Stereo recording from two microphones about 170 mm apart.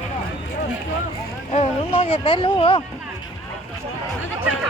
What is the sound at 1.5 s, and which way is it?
Speech, 35° left (ahead or behind).